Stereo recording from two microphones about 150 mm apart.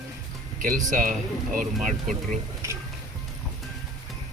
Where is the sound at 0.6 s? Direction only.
65° right (ahead or behind).